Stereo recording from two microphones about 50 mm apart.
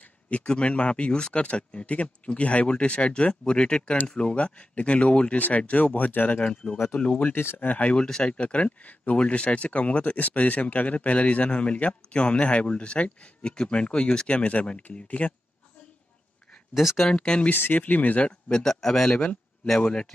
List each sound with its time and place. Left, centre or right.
0.3 s speech: left
4.4 s speech: left
6.4 s speech: centre
7.5 s speech: left
8.0 s speech: centre; by 15.3 s left
17.1 s speech: centre
17.5 s speech: left
18.5 s speech: centre